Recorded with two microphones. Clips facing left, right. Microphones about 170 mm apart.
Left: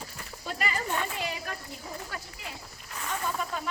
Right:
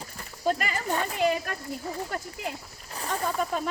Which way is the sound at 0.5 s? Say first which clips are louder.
Right 2 dB; 50° right (ahead or behind).